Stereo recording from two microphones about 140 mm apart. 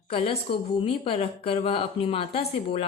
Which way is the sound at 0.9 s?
40° left (ahead or behind).